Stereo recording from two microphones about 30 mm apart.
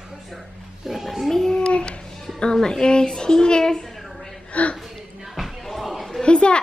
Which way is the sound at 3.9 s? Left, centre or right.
Centre.